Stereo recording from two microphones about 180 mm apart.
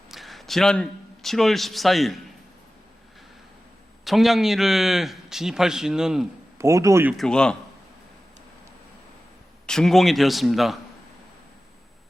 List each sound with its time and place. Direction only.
0.1 s a man's voice: centre (ahead or behind)
4.0 s a man's voice: centre (ahead or behind)
6.6 s speech: 15° right (ahead or behind)
7.1 s a man's voice: 5° left (ahead or behind)
9.6 s a man's voice: centre (ahead or behind)